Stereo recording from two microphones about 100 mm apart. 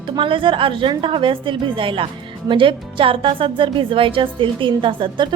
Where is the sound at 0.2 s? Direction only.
60° right (ahead or behind).